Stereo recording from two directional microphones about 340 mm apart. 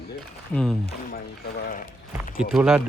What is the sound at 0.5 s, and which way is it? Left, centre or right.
Speech, centre.